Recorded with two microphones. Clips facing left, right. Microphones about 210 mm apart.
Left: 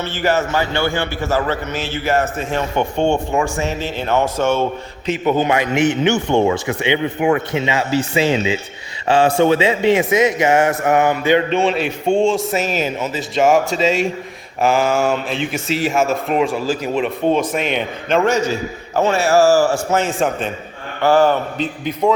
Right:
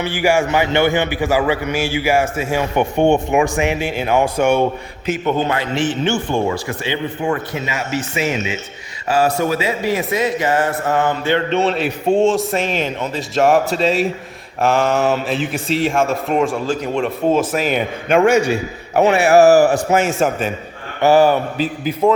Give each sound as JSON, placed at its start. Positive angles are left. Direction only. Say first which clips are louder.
{"t": 0.0, "sound": "a man's voice", "louder": "right 2 dB", "side_deg": -10}
{"t": 5.4, "sound": "a man's voice", "louder": "left 3 dB", "side_deg": 15}
{"t": 11.5, "sound": "a man's voice", "louder": "even", "side_deg": 0}